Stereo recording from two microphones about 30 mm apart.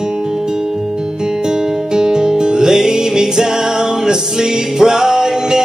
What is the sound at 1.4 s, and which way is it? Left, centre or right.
Music, right.